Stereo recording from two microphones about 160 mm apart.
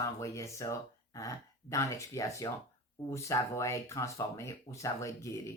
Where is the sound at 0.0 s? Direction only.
20° left (ahead or behind).